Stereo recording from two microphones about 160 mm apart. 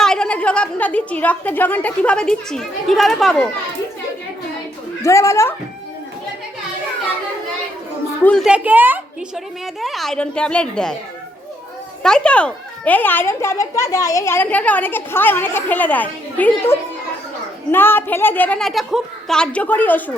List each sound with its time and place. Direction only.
0.0 s a woman's voice: 5° left (ahead or behind)
5.0 s a child's voice: 20° left (ahead or behind)
8.2 s a child's voice: 5° left (ahead or behind)
8.4 s a woman's voice: 10° right (ahead or behind)
9.8 s a woman's voice: centre (ahead or behind)
12.0 s a child's voice: 5° left (ahead or behind)